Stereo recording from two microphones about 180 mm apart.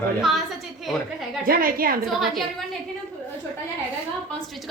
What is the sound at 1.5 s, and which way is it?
Speech, 55° right (ahead or behind).